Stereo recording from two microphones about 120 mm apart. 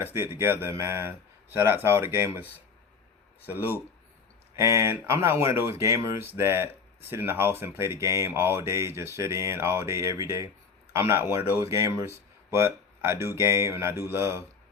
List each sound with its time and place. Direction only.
0.0 s speech: 20° right (ahead or behind)
3.5 s speech: 15° right (ahead or behind)